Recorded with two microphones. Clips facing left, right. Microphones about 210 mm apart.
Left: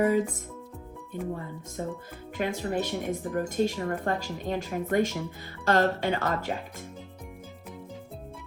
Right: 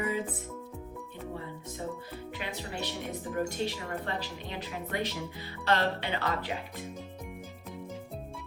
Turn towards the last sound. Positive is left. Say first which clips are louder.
# left 3 dB
turn(degrees=45)  # may be behind; listen again after turning